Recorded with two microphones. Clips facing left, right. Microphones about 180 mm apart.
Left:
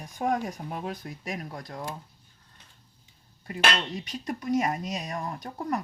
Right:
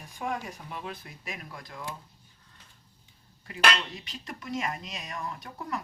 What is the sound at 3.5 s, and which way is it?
Speech, 45° left (ahead or behind).